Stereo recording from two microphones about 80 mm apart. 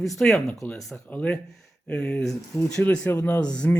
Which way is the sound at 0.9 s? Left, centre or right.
Left.